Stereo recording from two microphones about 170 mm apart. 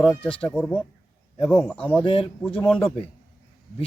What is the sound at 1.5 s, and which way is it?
Speech, 5° left (ahead or behind).